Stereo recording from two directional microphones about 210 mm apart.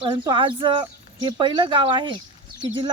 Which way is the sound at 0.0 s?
25° right (ahead or behind).